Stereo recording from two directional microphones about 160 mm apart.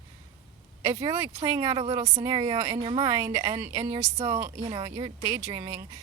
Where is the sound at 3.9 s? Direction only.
45° right (ahead or behind).